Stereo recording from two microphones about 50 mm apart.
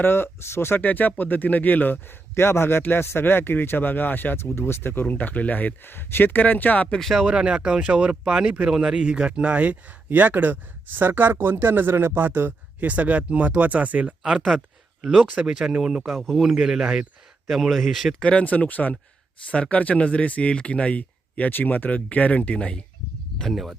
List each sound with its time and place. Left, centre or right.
0.0 s speech: left
0.8 s speech: left
2.3 s speech: left
5.0 s speech: left
5.8 s speech: left
6.4 s speech: left
7.0 s speech: centre
7.3 s speech: centre; by 12.9 s right
12.9 s speech: right
15.0 s speech: centre
16.0 s speech: centre
17.5 s speech: centre
18.2 s speech: left
23.5 s speech: centre